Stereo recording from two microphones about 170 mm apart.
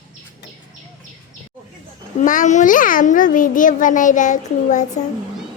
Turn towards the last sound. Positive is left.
turn(degrees=45)  # may be behind; listen again after turning